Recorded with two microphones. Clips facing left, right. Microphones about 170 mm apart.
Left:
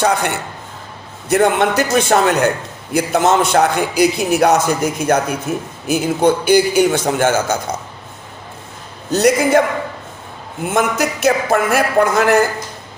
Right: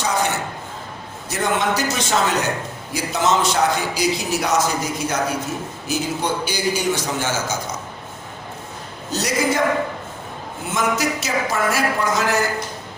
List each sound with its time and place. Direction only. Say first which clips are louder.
0.0 s a man's voice: left 5 dB; 60° left (ahead or behind)
9.1 s a man's voice: left 8 dB; 55° left (ahead or behind)
10.7 s a man's voice: left 4 dB; 55° left (ahead or behind)